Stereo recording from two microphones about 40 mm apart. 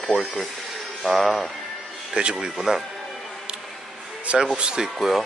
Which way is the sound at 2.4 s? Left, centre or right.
Centre.